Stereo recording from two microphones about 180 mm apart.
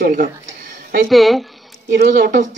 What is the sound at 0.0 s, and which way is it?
Speech, 55° right (ahead or behind).